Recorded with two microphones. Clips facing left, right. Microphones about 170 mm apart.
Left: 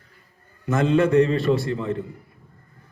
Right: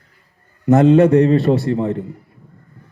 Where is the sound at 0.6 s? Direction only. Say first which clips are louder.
Right 9 dB; 65° right (ahead or behind).